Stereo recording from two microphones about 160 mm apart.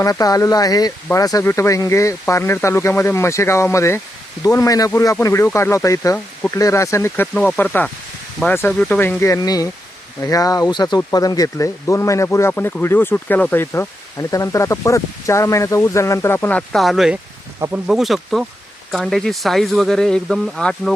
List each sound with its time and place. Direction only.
0.0 s speech: 20° left (ahead or behind); by 20.9 s 5° left (ahead or behind)